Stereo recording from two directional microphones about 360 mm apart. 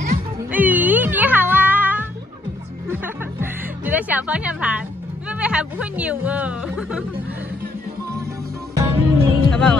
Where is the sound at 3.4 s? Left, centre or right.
Centre.